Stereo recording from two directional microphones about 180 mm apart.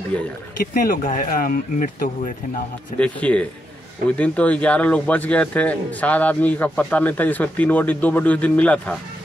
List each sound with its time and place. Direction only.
0.1 s speech: 5° left (ahead or behind)
0.7 s speech: 50° left (ahead or behind)
3.0 s speech: 5° left (ahead or behind)